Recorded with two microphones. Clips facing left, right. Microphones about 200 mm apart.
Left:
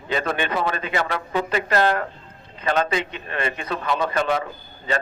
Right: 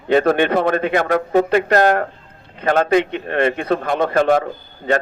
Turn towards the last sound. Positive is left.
turn(degrees=-55)  # may be behind; listen again after turning